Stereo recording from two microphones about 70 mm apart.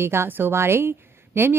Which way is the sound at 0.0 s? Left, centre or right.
Right.